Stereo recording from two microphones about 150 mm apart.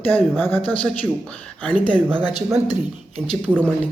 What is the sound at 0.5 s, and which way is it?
Speech, 10° left (ahead or behind).